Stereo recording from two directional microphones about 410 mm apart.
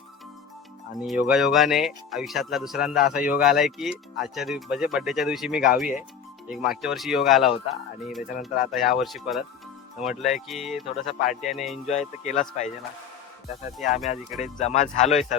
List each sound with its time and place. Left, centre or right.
1.0 s speech: centre
11.2 s speech: centre
11.4 s speech: centre
11.9 s speech: centre
14.1 s speech: centre